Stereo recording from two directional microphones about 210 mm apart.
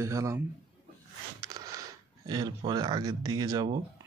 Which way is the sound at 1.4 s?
15° right (ahead or behind).